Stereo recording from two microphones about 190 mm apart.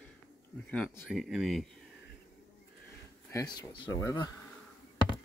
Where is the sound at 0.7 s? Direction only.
5° left (ahead or behind).